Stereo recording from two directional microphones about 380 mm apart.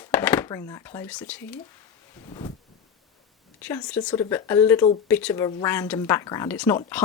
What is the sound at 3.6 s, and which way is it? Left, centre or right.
Speech, centre.